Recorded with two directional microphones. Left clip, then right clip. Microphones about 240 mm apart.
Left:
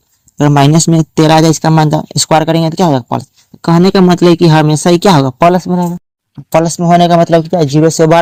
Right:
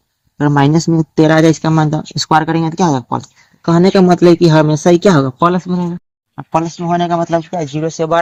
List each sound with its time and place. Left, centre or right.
0.3 s speech: left